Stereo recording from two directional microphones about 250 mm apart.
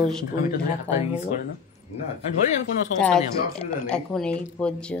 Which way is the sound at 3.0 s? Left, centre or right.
Centre.